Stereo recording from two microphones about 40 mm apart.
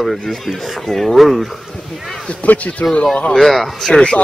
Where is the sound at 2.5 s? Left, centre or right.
Left.